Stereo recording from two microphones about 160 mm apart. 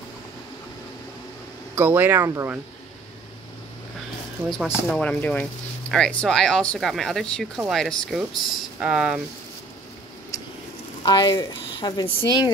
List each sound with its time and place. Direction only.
1.8 s speech: 10° right (ahead or behind)
4.8 s speech: 10° left (ahead or behind)
11.0 s speech: 25° left (ahead or behind)